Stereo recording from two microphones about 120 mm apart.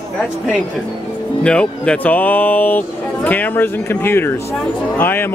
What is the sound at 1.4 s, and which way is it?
Speech, 10° left (ahead or behind).